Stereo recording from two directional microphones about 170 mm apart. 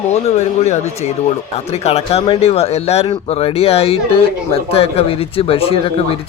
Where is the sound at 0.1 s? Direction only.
40° left (ahead or behind).